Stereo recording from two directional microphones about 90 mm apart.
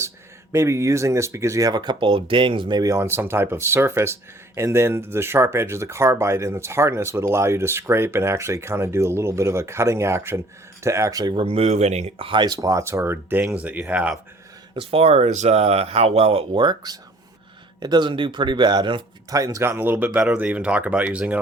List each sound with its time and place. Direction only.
0.5 s speech: 35° right (ahead or behind)
1.7 s speech: 55° right (ahead or behind); by 2.7 s 70° right (ahead or behind)
2.7 s speech: 40° right (ahead or behind)
11.3 s speech: 90° right
12.2 s speech: 70° right (ahead or behind)
12.5 s speech: 40° right (ahead or behind)
12.8 s speech: 30° right (ahead or behind); by 14.2 s 15° right (ahead or behind)
14.8 s speech: 90° right; by 19.0 s 55° right (ahead or behind)
19.3 s speech: 40° right (ahead or behind); by 21.3 s 15° right (ahead or behind)